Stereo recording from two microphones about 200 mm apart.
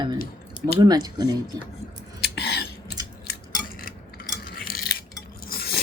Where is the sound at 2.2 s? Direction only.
55° left (ahead or behind).